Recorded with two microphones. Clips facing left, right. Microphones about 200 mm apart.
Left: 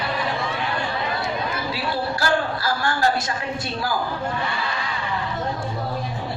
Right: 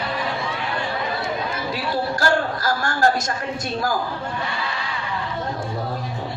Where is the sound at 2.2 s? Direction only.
45° right (ahead or behind).